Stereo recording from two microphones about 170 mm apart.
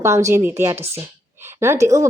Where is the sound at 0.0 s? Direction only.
15° right (ahead or behind).